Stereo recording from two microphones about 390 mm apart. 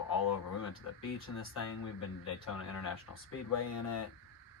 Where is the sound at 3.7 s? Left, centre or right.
Left.